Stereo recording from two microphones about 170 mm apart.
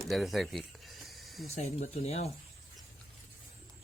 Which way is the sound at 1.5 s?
40° left (ahead or behind).